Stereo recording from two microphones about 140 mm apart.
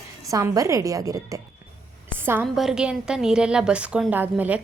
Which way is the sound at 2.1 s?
15° right (ahead or behind).